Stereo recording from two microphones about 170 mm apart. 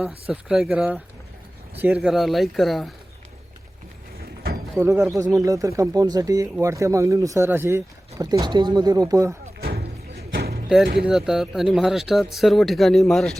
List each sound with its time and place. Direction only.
0.3 s speech: 5° right (ahead or behind)
4.8 s speech: 15° right (ahead or behind)
9.6 s music: 65° right (ahead or behind)
11.0 s speech: 5° right (ahead or behind)